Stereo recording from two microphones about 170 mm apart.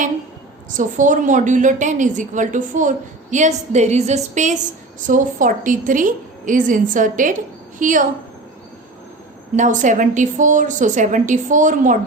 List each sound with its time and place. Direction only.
0.8 s a woman's voice: 50° right (ahead or behind)
9.6 s a woman's voice: 45° right (ahead or behind)